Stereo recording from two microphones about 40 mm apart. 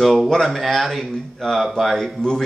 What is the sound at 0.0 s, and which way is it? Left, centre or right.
Speech, centre.